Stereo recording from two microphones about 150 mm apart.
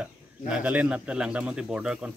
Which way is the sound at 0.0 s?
10° right (ahead or behind).